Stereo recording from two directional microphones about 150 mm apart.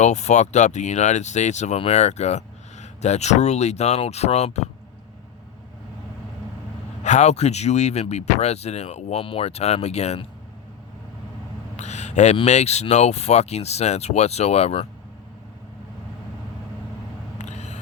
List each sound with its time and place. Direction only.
0.0 s speech: 50° left (ahead or behind)
7.0 s speech: 50° left (ahead or behind)
11.8 s speech: 50° left (ahead or behind)
17.3 s a sound: 50° left (ahead or behind)